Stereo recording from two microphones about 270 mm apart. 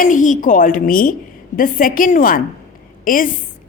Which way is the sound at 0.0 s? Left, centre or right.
Left.